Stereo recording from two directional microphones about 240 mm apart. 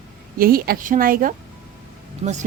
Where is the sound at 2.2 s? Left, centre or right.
Right.